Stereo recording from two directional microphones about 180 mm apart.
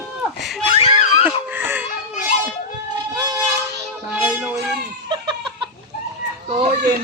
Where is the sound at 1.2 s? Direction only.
10° right (ahead or behind).